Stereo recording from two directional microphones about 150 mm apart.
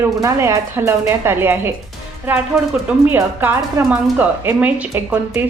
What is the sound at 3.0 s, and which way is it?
A woman's voice, 15° right (ahead or behind).